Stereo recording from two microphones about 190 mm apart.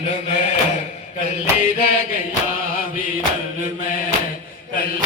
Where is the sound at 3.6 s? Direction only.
45° left (ahead or behind).